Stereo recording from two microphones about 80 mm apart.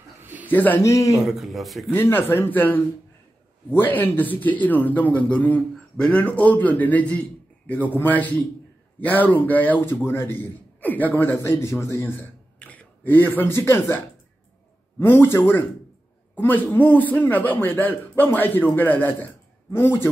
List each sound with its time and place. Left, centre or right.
0.2 s a sound: right
0.5 s a man's voice: left
0.8 s speech: left
1.2 s speech: centre
2.0 s speech: left
12.5 s speech: centre
15.1 s speech: left